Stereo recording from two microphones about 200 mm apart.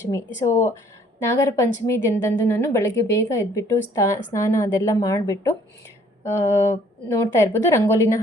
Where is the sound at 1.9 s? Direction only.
15° left (ahead or behind).